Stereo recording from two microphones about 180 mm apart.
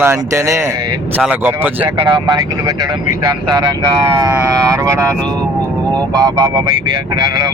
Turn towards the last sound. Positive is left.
turn(degrees=-20)  # may be behind; listen again after turning